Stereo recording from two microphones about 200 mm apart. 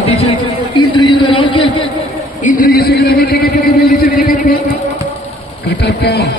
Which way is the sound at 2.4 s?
45° left (ahead or behind).